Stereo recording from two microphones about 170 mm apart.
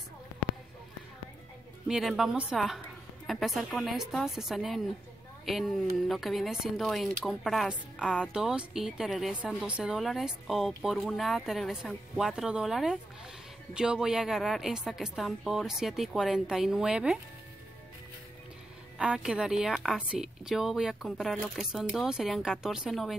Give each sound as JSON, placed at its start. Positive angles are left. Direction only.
{"t": 1.9, "sound": "a woman's voice", "side_deg": 0}
{"t": 18.9, "sound": "a woman's voice", "side_deg": -5}